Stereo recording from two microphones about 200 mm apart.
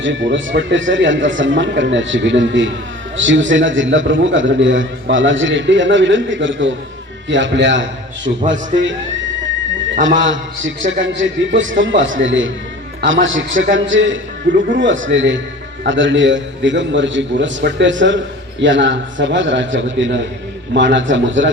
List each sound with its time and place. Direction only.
0.0 s a man's voice: 65° right (ahead or behind)
10.2 s a man's voice: 70° right (ahead or behind)